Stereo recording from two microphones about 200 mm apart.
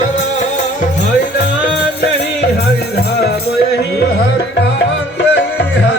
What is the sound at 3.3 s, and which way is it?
Music, 55° left (ahead or behind).